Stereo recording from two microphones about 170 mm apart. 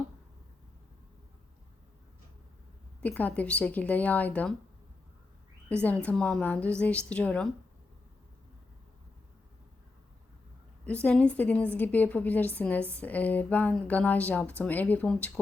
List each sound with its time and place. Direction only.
3.0 s a woman's voice: 10° left (ahead or behind)
5.6 s a woman's voice: 10° left (ahead or behind)
10.8 s a woman's voice: 10° left (ahead or behind)